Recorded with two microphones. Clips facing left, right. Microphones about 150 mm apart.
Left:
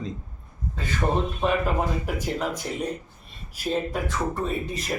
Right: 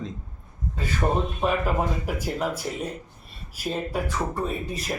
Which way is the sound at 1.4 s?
10° right (ahead or behind).